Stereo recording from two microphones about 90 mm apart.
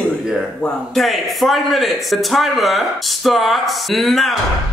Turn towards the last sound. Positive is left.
turn(degrees=0)  # may be behind; listen again after turning